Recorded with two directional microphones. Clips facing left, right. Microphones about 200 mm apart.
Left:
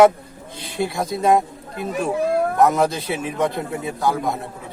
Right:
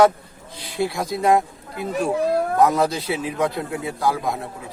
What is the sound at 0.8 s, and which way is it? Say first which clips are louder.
Speech: even; centre (ahead or behind).